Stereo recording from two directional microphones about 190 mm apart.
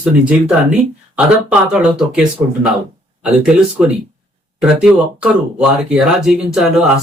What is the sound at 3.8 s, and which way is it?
Speech, 5° right (ahead or behind).